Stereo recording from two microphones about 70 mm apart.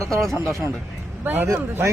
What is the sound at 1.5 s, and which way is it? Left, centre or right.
Speech, right.